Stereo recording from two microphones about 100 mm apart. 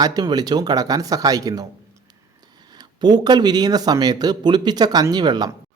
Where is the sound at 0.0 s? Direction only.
45° right (ahead or behind).